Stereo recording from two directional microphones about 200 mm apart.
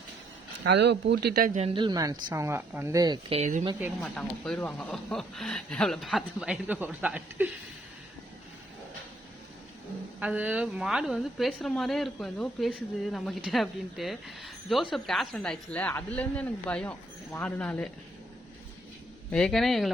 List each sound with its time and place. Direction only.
0.6 s speech: 60° right (ahead or behind); by 1.7 s 40° right (ahead or behind)
1.7 s speech: 20° right (ahead or behind)
4.0 s a woman's voice: 5° left (ahead or behind)
10.2 s a woman's voice: 10° right (ahead or behind)
19.3 s a woman's voice: 5° left (ahead or behind)